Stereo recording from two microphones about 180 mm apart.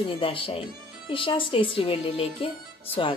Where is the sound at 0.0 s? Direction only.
30° left (ahead or behind).